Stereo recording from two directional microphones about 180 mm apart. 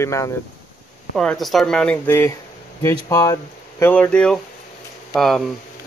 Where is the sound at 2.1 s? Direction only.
15° left (ahead or behind).